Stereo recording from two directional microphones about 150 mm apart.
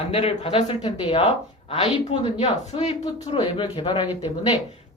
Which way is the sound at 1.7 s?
35° left (ahead or behind).